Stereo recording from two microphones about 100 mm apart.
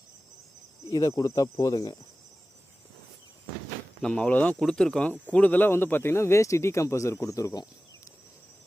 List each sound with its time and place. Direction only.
0.9 s speech: 35° left (ahead or behind)
4.0 s speech: 10° left (ahead or behind); by 8.1 s 35° left (ahead or behind)